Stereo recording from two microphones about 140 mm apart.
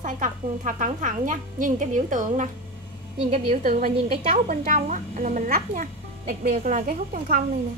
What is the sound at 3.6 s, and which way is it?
Speech, 75° right (ahead or behind).